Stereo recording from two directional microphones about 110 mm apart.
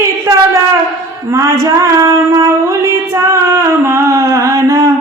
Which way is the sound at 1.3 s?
30° right (ahead or behind).